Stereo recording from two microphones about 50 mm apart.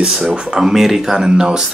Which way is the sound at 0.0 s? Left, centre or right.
Centre.